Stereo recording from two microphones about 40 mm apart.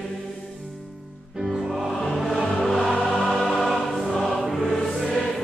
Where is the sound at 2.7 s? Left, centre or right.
Centre.